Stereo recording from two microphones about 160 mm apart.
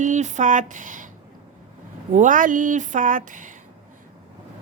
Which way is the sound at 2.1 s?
55° right (ahead or behind).